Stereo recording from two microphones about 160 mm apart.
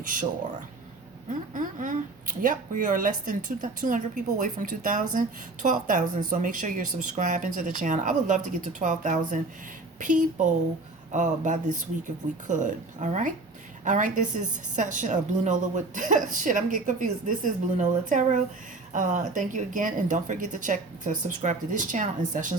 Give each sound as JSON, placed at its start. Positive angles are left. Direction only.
{"t": 0.0, "sound": "speech", "side_deg": -55}
{"t": 1.3, "sound": "a woman's voice", "side_deg": -55}